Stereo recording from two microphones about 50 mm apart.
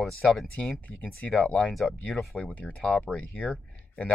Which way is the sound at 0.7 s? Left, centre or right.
Left.